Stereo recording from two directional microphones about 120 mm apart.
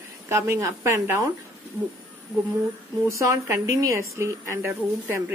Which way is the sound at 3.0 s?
25° right (ahead or behind).